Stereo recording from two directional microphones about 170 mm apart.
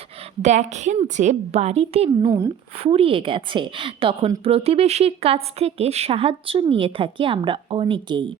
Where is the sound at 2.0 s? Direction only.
20° right (ahead or behind).